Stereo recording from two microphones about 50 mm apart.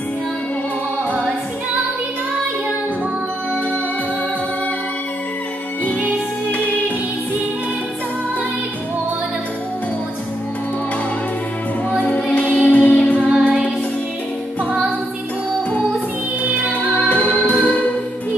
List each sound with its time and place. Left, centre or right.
12.0 s music: left
13.4 s music: right
17.0 s music: left